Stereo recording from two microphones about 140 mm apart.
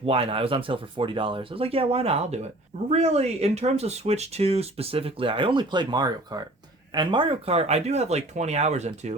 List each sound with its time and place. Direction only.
0.0 s speech: 40° right (ahead or behind)